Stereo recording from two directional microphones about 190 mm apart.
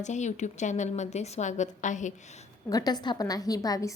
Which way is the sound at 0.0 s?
40° left (ahead or behind).